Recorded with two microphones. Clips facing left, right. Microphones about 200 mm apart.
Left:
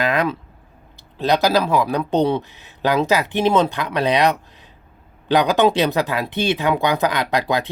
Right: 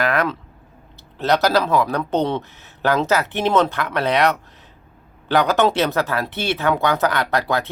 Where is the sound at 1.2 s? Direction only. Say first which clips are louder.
Even; 15° left (ahead or behind).